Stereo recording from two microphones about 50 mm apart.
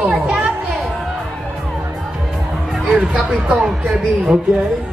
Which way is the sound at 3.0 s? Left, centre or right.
Right.